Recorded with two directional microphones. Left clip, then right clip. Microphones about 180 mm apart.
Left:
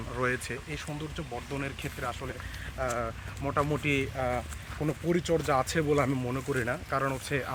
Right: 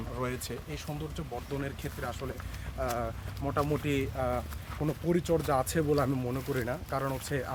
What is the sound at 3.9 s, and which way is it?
Speech, 35° left (ahead or behind).